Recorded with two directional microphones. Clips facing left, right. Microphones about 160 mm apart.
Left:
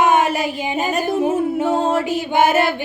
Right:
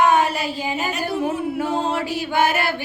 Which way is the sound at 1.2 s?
20° left (ahead or behind).